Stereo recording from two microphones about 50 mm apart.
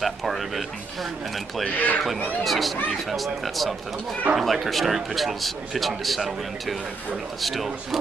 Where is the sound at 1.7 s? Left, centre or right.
Left.